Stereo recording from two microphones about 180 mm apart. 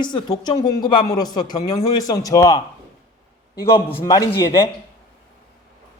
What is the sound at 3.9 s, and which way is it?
Speech, 15° left (ahead or behind).